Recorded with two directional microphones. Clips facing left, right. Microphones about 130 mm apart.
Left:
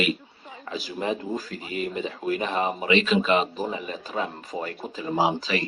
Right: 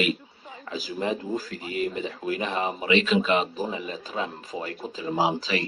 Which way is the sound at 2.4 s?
35° left (ahead or behind).